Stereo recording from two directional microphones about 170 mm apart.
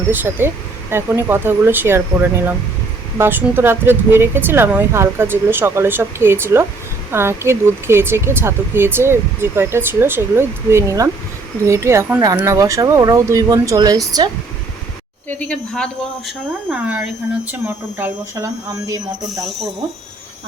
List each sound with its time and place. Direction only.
0.1 s speech: 10° right (ahead or behind)
3.2 s speech: 10° right (ahead or behind)
15.3 s speech: 10° left (ahead or behind)
16.7 s speech: 10° right (ahead or behind)